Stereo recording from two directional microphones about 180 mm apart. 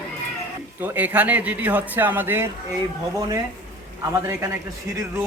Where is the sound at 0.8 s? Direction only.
10° right (ahead or behind).